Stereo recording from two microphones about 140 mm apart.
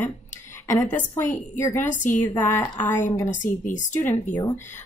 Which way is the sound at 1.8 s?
65° left (ahead or behind).